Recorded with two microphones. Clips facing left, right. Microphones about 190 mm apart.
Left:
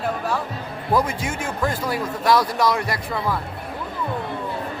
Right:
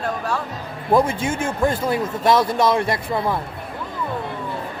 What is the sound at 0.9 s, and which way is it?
A man's voice, 25° right (ahead or behind).